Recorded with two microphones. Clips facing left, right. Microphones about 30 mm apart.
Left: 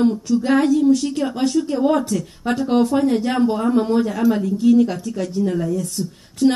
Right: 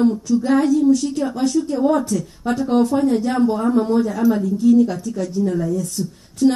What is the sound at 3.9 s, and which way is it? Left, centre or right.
Speech, left.